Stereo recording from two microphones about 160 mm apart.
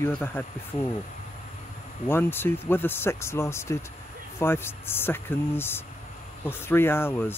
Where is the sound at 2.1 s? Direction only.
15° left (ahead or behind).